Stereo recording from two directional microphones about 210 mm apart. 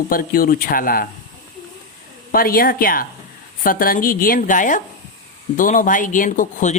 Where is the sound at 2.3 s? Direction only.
45° left (ahead or behind).